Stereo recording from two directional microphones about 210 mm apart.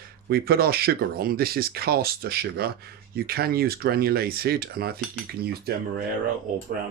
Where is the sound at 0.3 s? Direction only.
45° right (ahead or behind).